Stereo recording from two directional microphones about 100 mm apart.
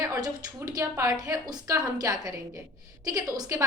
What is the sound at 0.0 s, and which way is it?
A woman's voice, 35° right (ahead or behind).